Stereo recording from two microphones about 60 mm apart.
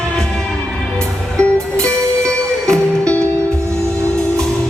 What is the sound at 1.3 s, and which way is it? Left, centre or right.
Music, centre.